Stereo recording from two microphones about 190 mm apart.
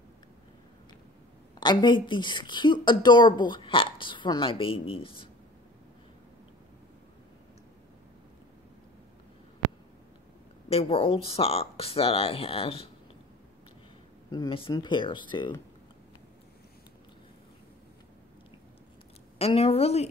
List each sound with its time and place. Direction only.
1.6 s a woman's voice: 25° left (ahead or behind)
10.7 s speech: 30° left (ahead or behind)
14.3 s speech: 25° left (ahead or behind)
19.3 s speech: 30° left (ahead or behind)